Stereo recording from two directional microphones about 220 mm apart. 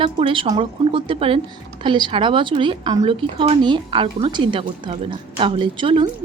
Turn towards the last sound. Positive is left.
turn(degrees=-25)  # may be behind; listen again after turning